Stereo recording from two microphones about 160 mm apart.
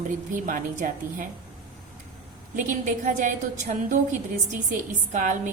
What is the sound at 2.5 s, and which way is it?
A woman's voice, 50° right (ahead or behind).